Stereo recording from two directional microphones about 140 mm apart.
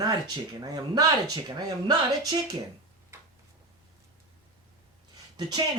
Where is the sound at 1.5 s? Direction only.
30° right (ahead or behind).